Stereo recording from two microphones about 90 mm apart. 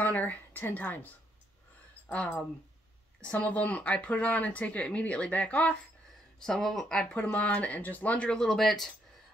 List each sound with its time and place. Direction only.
0.0 s a woman's voice: 20° left (ahead or behind)
2.0 s speech: 15° left (ahead or behind)
6.4 s speech: 5° left (ahead or behind)